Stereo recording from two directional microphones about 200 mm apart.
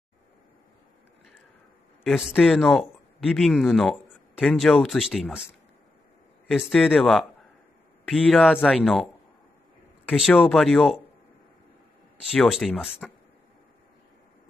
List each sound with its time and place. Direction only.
2.0 s speech: centre (ahead or behind)
10.1 s speech: centre (ahead or behind)
12.2 s speech: 5° right (ahead or behind)